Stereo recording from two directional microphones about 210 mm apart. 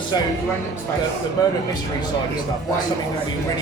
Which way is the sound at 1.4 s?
15° left (ahead or behind).